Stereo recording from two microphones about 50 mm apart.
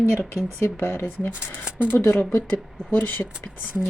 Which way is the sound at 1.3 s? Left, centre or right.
Right.